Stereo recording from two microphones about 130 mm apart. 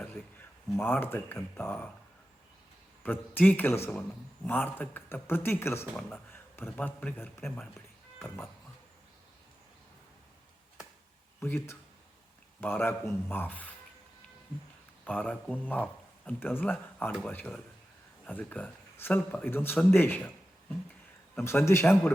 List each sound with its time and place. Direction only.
0.0 s a sound: 15° left (ahead or behind)
0.8 s speech: 15° left (ahead or behind)
3.0 s a man's voice: 15° left (ahead or behind)
7.4 s speech: 5° left (ahead or behind)
11.3 s speech: 20° left (ahead or behind)
15.0 s a man's voice: 10° left (ahead or behind)